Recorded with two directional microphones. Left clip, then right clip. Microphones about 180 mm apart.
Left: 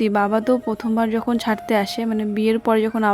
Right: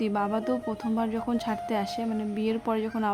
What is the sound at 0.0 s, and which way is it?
Speech, 35° left (ahead or behind).